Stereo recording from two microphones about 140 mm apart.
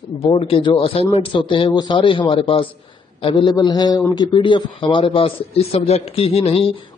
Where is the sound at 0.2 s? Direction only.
40° left (ahead or behind).